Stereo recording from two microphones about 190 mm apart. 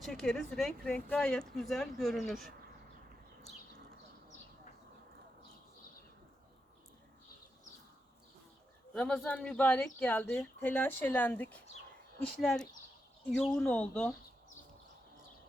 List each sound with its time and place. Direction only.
0.0 s speech: centre (ahead or behind)
8.9 s speech: 5° left (ahead or behind)